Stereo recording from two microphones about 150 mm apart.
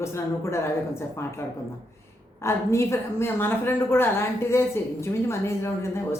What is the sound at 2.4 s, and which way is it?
A woman's voice, 20° left (ahead or behind).